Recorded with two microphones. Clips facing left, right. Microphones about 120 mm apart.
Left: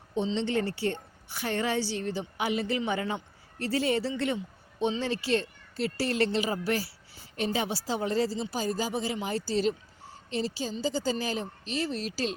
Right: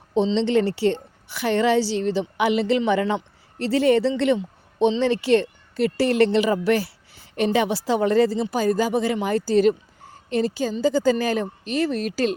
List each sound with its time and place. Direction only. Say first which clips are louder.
0.1 s a woman's voice: right 9 dB; 90° right; by 12.3 s 55° right (ahead or behind)